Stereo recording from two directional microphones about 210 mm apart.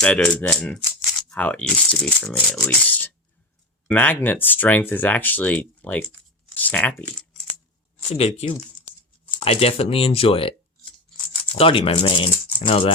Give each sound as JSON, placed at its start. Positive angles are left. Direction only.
{"t": 0.0, "sound": "speech", "side_deg": 5}
{"t": 8.1, "sound": "speech", "side_deg": 30}
{"t": 11.5, "sound": "speech", "side_deg": 25}